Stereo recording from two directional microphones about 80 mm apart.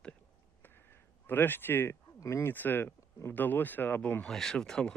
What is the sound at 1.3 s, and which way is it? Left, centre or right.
Speech, left.